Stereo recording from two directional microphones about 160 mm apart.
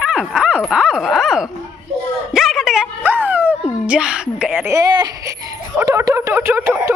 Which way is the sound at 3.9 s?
5° right (ahead or behind).